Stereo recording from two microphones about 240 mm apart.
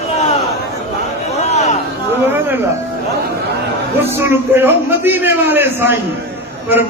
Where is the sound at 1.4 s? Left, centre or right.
Left.